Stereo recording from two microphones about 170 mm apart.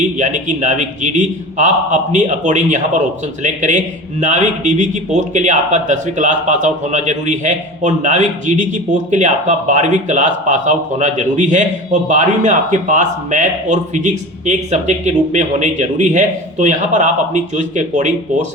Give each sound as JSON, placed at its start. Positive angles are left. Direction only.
{"t": 0.0, "sound": "a man's voice", "side_deg": -45}